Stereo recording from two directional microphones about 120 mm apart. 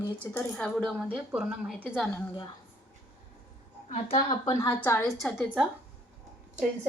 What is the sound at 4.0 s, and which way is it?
Speech, 50° left (ahead or behind).